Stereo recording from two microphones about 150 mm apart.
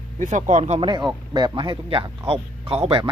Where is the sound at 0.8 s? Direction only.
30° right (ahead or behind).